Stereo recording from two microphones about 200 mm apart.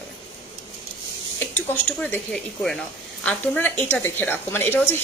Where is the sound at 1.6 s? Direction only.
10° left (ahead or behind).